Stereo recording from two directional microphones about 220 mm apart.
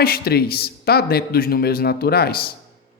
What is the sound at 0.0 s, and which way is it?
A woman's voice, 45° left (ahead or behind).